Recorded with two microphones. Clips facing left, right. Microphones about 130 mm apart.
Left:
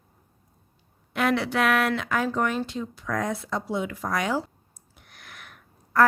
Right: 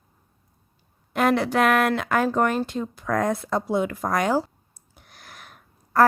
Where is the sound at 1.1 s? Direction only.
45° right (ahead or behind).